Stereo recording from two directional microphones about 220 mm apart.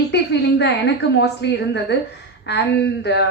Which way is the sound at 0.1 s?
50° left (ahead or behind).